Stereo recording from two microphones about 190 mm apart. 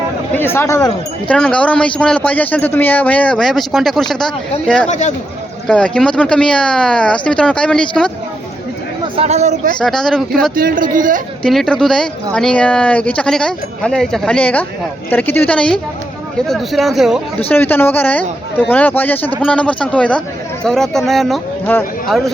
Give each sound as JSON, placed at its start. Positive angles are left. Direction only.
{"t": 0.3, "sound": "a man's voice", "side_deg": 10}
{"t": 4.9, "sound": "speech", "side_deg": 40}
{"t": 5.6, "sound": "speech", "side_deg": 5}
{"t": 9.1, "sound": "speech", "side_deg": -35}
{"t": 9.8, "sound": "speech", "side_deg": 0}
{"t": 10.5, "sound": "speech", "side_deg": -45}
{"t": 11.4, "sound": "a man's voice", "side_deg": 0}
{"t": 17.5, "sound": "a man's voice", "side_deg": 10}